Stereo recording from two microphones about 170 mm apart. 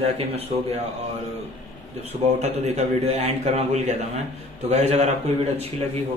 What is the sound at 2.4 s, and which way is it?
Speech, 40° right (ahead or behind).